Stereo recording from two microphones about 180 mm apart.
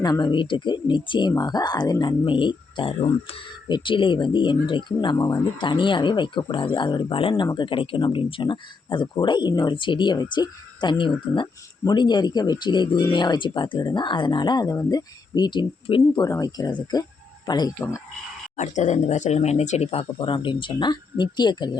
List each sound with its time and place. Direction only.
0.0 s speech: 25° left (ahead or behind)
18.5 s speech: 40° left (ahead or behind); by 21.7 s 25° left (ahead or behind)